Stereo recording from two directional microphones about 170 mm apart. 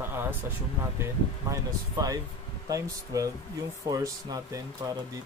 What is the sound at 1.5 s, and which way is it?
Speech, 20° right (ahead or behind).